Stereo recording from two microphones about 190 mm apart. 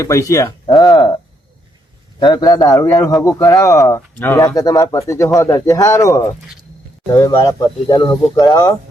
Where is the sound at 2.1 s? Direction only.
25° left (ahead or behind).